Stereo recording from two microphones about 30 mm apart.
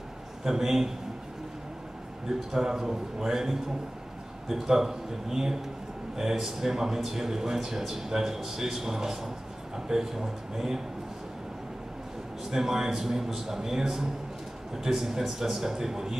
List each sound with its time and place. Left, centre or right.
0.4 s a man's voice: centre
2.5 s a man's voice: centre
12.4 s a man's voice: centre